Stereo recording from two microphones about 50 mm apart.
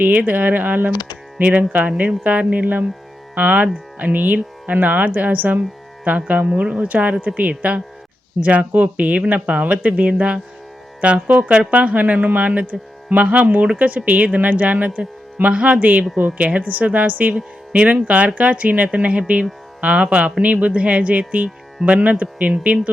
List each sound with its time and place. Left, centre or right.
0.0 s speech: right